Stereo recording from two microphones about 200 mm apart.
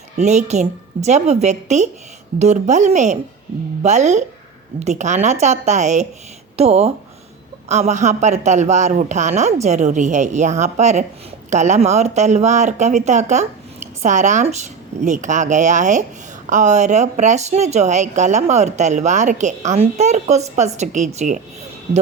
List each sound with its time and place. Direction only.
0.2 s speech: 35° right (ahead or behind)